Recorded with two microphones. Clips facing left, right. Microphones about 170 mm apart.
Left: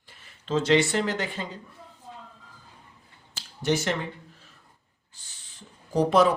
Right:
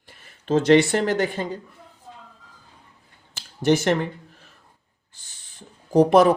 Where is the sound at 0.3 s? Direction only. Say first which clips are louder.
Right 6 dB; 55° right (ahead or behind).